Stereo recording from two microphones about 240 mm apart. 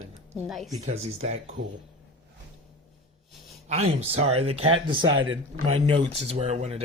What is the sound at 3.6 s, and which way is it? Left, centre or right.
Speech, right.